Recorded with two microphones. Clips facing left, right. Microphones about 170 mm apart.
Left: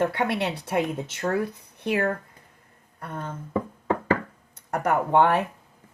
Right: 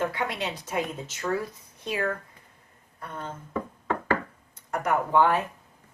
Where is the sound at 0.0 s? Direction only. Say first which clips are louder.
Left 5 dB; 65° left (ahead or behind).